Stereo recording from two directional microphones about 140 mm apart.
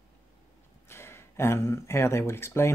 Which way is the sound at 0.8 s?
20° left (ahead or behind).